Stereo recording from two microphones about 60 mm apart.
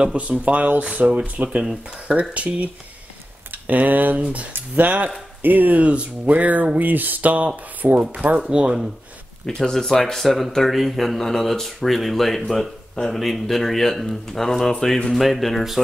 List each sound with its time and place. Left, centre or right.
0.0 s speech: right
1.6 s speech: centre
2.1 s speech: right
9.5 s speech: centre